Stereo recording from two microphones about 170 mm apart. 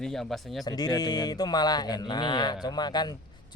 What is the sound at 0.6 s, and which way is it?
Speech, 25° left (ahead or behind).